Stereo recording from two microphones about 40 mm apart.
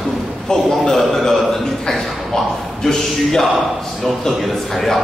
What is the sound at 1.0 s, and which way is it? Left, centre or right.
A man's voice, centre.